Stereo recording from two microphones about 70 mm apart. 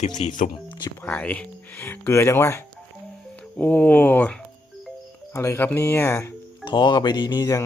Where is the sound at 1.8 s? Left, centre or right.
Left.